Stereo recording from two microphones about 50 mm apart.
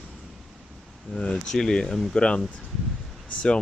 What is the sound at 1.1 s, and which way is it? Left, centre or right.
Speech, left.